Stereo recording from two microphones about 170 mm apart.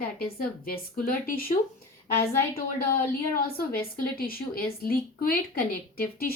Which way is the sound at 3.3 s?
60° left (ahead or behind).